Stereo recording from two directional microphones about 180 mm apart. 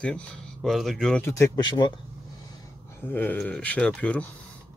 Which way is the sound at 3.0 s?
10° left (ahead or behind).